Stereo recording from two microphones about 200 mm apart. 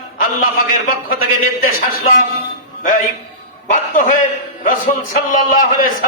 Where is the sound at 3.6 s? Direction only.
40° left (ahead or behind).